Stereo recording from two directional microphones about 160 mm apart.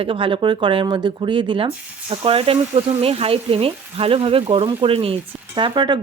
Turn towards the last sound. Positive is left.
turn(degrees=-30)  # may be behind; listen again after turning